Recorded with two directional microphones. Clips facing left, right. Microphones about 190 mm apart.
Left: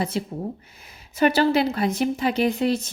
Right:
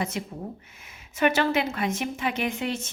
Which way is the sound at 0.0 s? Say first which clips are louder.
Left 5 dB; 30° left (ahead or behind).